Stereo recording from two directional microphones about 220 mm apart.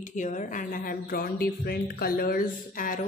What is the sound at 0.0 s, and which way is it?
A woman's voice, 35° left (ahead or behind).